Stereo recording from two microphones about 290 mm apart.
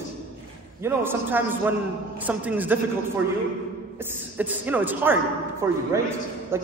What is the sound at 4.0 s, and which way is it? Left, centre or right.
A man's voice, centre.